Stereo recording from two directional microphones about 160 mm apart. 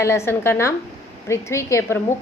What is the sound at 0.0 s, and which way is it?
A woman's voice, 15° left (ahead or behind).